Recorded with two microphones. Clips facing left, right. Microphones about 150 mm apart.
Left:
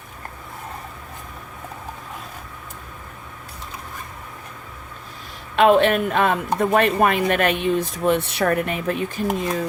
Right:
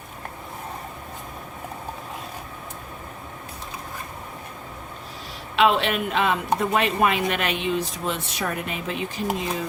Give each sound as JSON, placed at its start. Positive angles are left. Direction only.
{"t": 5.5, "sound": "speech", "side_deg": 50}